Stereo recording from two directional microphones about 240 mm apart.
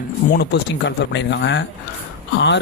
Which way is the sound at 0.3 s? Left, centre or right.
Left.